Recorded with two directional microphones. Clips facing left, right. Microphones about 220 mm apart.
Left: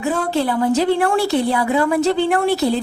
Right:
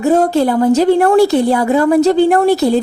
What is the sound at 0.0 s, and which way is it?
A woman's voice, 40° right (ahead or behind).